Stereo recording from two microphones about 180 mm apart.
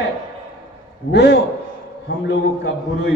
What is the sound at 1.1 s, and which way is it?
A man's voice, 75° left (ahead or behind).